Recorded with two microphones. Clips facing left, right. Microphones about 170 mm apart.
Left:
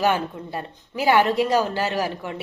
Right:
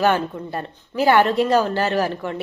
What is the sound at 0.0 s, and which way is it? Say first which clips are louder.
A woman's voice: right 3 dB; 10° left (ahead or behind).